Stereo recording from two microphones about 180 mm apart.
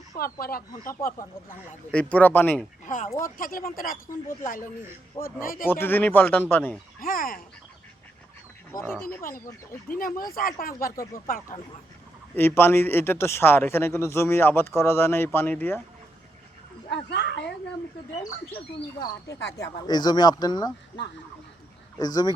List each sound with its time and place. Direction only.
0.3 s speech: 55° left (ahead or behind)
1.9 s speech: 5° left (ahead or behind)
2.8 s speech: 45° left (ahead or behind)
5.2 s speech: 50° left (ahead or behind)
5.6 s speech: 10° left (ahead or behind)
7.0 s speech: 50° left (ahead or behind)
9.2 s speech: 55° left (ahead or behind)
12.3 s speech: 10° left (ahead or behind)
16.9 s speech: 70° left (ahead or behind)
19.3 s speech: 75° left (ahead or behind)
19.9 s speech: 25° left (ahead or behind)